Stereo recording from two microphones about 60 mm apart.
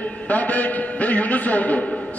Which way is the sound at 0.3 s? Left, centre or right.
Left.